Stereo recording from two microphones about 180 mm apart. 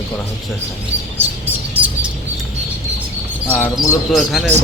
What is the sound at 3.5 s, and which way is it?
Speech, 10° left (ahead or behind).